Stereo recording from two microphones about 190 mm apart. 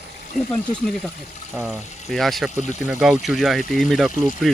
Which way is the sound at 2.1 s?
Centre (ahead or behind).